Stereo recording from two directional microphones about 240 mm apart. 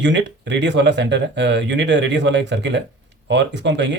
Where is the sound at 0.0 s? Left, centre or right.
Right.